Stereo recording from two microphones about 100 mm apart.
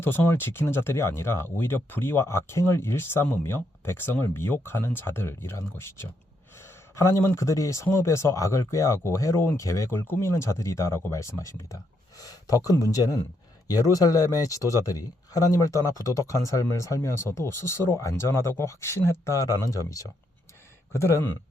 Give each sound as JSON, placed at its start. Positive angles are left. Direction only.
{"t": 0.0, "sound": "speech", "side_deg": 25}